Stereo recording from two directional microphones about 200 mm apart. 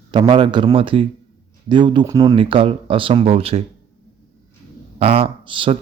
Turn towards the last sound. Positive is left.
turn(degrees=-25)  # may be behind; listen again after turning